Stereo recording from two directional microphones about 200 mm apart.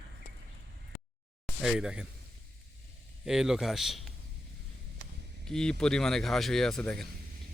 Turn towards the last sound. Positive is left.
turn(degrees=5)  # may be behind; listen again after turning